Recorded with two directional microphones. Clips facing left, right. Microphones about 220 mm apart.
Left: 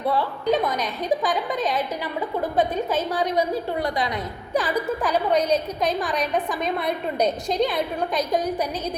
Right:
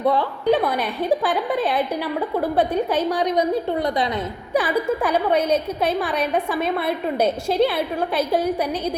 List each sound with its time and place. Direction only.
0.2 s a woman's voice: 15° right (ahead or behind)
2.6 s a woman's voice: 15° right (ahead or behind)
6.0 s a woman's voice: 10° right (ahead or behind)